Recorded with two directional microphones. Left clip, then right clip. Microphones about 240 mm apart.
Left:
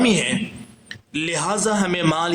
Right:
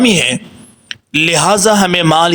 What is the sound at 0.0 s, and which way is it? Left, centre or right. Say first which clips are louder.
Speech: right 8 dB; right.